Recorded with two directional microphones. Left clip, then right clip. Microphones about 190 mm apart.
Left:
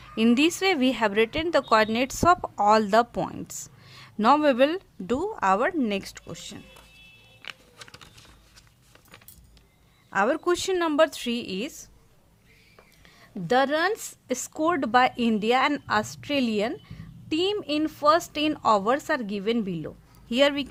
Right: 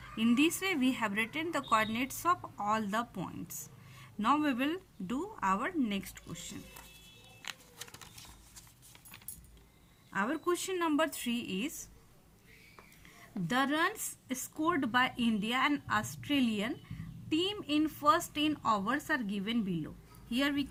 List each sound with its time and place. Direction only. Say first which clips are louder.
0.2 s a woman's voice: left 8 dB; 55° left (ahead or behind)
3.5 s a woman's voice: left 8 dB; 75° left (ahead or behind); by 6.4 s 50° left (ahead or behind)
10.1 s a woman's voice: left 10 dB; 55° left (ahead or behind)
13.6 s a woman's voice: left 7 dB; 60° left (ahead or behind)